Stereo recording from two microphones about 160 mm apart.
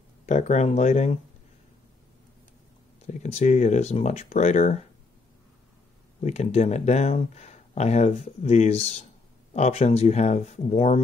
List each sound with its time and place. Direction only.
0.3 s speech: 45° left (ahead or behind)
3.1 s speech: 45° left (ahead or behind)
6.2 s speech: 45° left (ahead or behind)